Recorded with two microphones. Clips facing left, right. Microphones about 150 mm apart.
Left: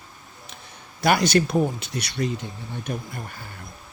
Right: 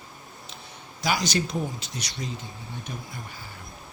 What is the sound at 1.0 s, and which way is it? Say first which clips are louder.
Speech: left 7 dB; 60° left (ahead or behind).